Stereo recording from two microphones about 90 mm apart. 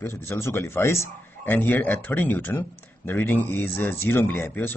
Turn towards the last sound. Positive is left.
turn(degrees=25)  # may be behind; listen again after turning